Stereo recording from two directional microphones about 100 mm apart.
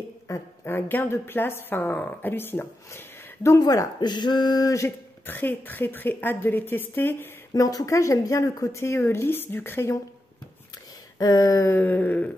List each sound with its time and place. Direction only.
0.7 s a woman's voice: 20° left (ahead or behind)
3.5 s speech: 35° left (ahead or behind)
5.2 s a woman's voice: 20° left (ahead or behind)
7.5 s a woman's voice: 35° left (ahead or behind)
11.1 s speech: 40° left (ahead or behind)
11.7 s a sound: 20° left (ahead or behind)